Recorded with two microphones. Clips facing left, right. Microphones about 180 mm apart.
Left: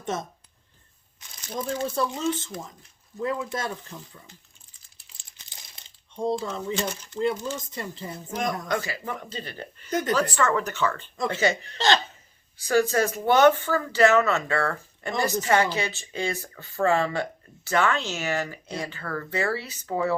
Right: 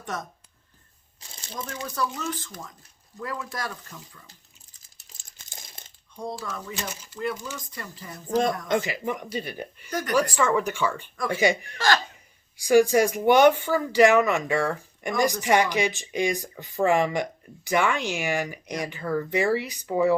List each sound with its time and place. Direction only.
0.0 s speech: 25° left (ahead or behind)
1.2 s crumpling: 30° right (ahead or behind)
1.5 s speech: 25° left (ahead or behind)
4.3 s crumpling: 40° right (ahead or behind)
6.1 s speech: 25° left (ahead or behind)
6.8 s speech: 5° right (ahead or behind)
7.6 s speech: 25° left (ahead or behind)
8.6 s speech: 20° right (ahead or behind)
9.9 s speech: 25° left (ahead or behind)
10.2 s speech: 10° right (ahead or behind)